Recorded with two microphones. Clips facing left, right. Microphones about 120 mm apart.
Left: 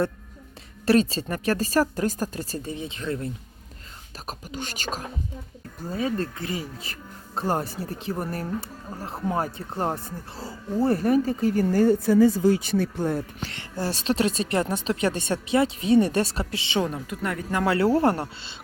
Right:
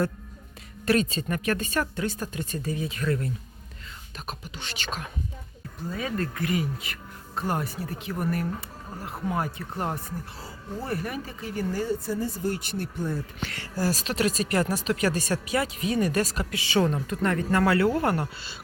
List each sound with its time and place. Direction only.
0.9 s speech: 30° left (ahead or behind)
4.3 s speech: 45° left (ahead or behind); by 13.2 s 75° left (ahead or behind)
13.4 s a woman's voice: 25° left (ahead or behind)
17.7 s speech: 30° left (ahead or behind)